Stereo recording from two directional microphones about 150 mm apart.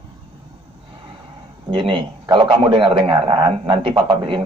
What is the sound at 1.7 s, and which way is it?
A man's voice, 35° right (ahead or behind).